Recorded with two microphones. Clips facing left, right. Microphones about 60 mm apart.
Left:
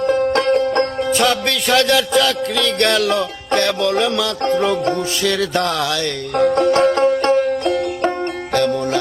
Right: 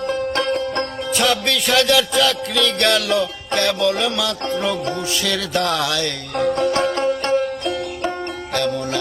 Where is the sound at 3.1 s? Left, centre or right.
Left.